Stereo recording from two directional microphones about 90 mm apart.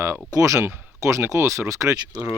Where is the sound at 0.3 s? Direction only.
40° right (ahead or behind).